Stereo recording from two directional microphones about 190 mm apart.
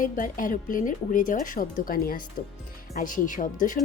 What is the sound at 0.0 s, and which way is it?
A woman's voice, 45° left (ahead or behind).